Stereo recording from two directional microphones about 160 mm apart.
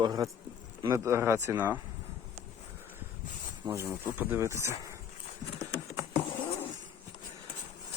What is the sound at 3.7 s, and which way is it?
Speech, 20° right (ahead or behind).